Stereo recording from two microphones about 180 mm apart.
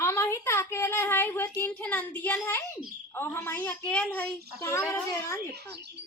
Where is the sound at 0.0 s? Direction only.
15° left (ahead or behind).